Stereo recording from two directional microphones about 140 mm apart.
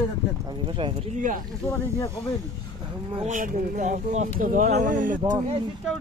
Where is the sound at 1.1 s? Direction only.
70° right (ahead or behind).